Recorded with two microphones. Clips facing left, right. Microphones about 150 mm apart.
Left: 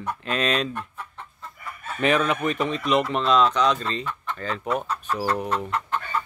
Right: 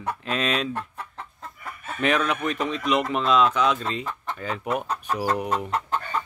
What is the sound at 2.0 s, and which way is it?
Chicken, centre (ahead or behind).